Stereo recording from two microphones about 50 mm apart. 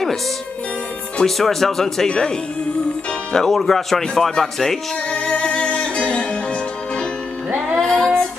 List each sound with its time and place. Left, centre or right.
1.2 s speech: centre
3.3 s speech: centre
5.1 s music: left
7.7 s female singing: centre